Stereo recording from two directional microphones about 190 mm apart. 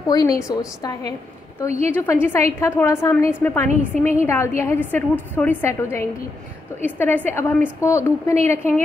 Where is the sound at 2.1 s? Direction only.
15° left (ahead or behind).